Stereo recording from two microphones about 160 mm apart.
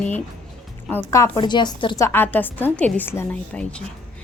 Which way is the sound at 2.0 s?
15° left (ahead or behind).